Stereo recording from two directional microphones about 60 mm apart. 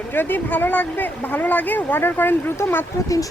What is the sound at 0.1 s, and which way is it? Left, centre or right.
Speech, left.